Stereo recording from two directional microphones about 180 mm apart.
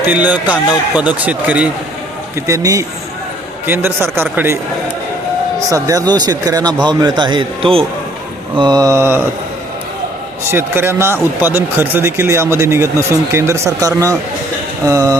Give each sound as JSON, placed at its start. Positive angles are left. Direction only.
{"t": 0.1, "sound": "speech", "side_deg": -10}
{"t": 5.5, "sound": "speech", "side_deg": -20}
{"t": 10.5, "sound": "speech", "side_deg": -15}